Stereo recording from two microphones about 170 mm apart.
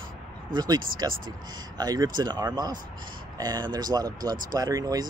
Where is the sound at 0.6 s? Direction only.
25° right (ahead or behind).